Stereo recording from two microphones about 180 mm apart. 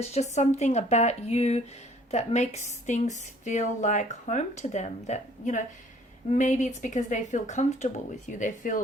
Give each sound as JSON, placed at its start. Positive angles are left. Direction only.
{"t": 0.0, "sound": "a woman's voice", "side_deg": 40}